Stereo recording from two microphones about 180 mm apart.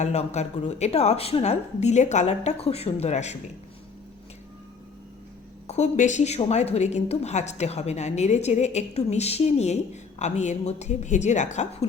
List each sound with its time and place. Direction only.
0.0 s a woman's voice: 40° left (ahead or behind)
5.6 s a woman's voice: 40° left (ahead or behind)